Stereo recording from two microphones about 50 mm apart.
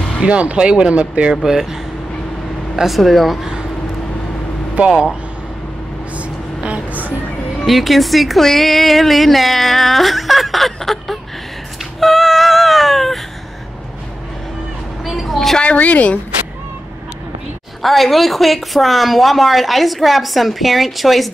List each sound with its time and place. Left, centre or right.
0.2 s speech: right
1.3 s speech: centre
4.7 s speech: centre
6.1 s vehicle: right
7.6 s speech: centre
15.0 s speech: centre
15.6 s a woman's voice: left
17.8 s speech: centre